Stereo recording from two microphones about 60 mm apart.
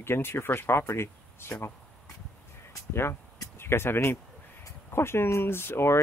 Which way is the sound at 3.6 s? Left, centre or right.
Left.